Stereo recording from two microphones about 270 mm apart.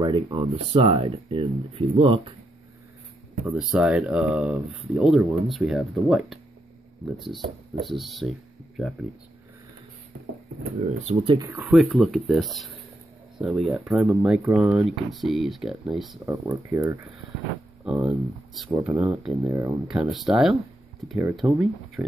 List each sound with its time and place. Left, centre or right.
0.0 s speech: centre
3.5 s speech: centre
11.1 s speech: centre